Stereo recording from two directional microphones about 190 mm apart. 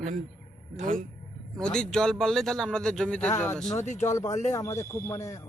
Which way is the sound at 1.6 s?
5° left (ahead or behind).